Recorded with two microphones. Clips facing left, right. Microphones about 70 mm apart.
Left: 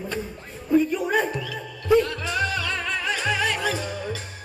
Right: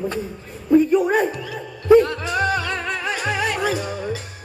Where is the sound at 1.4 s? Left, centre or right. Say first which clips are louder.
Right 2 dB; right.